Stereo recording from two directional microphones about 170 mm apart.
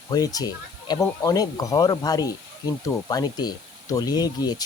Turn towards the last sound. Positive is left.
turn(degrees=25)  # may be behind; listen again after turning